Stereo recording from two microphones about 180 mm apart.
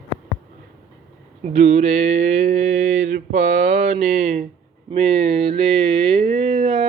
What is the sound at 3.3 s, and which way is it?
Speech, 40° right (ahead or behind).